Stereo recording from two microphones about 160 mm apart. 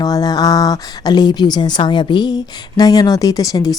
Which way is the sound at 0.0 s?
25° left (ahead or behind).